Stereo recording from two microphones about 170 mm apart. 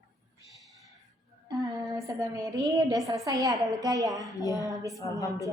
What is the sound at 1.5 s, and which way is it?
A woman's voice, 20° right (ahead or behind).